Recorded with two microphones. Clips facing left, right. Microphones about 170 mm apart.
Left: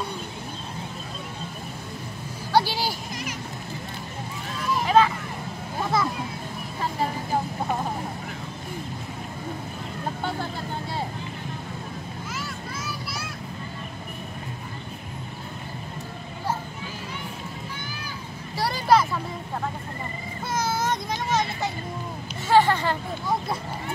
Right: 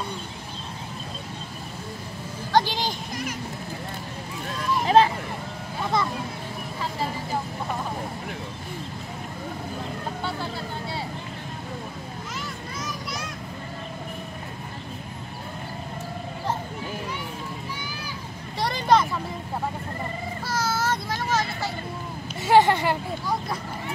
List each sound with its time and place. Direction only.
2.5 s vehicle: 10° left (ahead or behind)
4.8 s vehicle: 30° right (ahead or behind)
12.4 s vehicle: 5° left (ahead or behind)
18.6 s vehicle: 5° left (ahead or behind)
20.4 s child singing: 20° left (ahead or behind)
22.5 s vehicle: 15° right (ahead or behind)